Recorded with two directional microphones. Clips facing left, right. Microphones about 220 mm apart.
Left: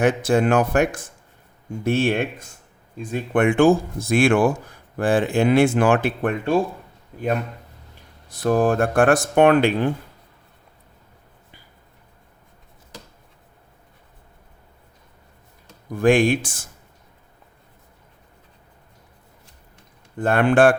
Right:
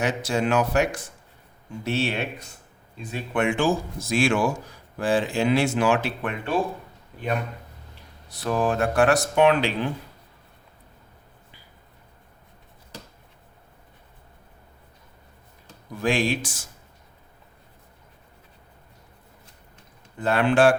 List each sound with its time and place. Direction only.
0.0 s speech: 55° left (ahead or behind)
8.3 s speech: 45° left (ahead or behind)
16.0 s speech: 55° left (ahead or behind)
20.1 s speech: 50° left (ahead or behind)